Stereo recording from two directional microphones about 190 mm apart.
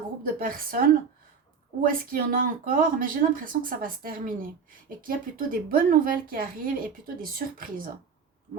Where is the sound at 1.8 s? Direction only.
45° right (ahead or behind).